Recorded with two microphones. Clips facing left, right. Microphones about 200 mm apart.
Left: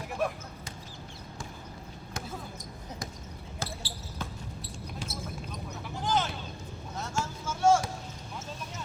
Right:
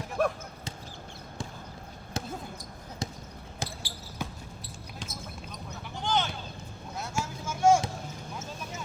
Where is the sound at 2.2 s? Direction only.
25° right (ahead or behind).